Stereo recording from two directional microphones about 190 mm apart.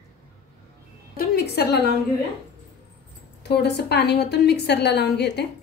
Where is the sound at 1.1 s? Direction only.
55° left (ahead or behind).